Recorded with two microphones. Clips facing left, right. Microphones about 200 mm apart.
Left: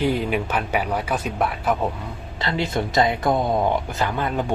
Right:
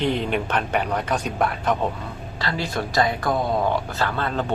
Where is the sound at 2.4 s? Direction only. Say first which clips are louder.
Left 3 dB; 20° left (ahead or behind).